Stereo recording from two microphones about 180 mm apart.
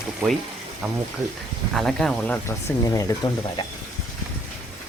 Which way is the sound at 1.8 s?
5° left (ahead or behind).